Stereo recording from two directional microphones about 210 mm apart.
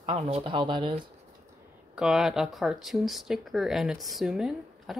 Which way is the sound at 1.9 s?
Centre (ahead or behind).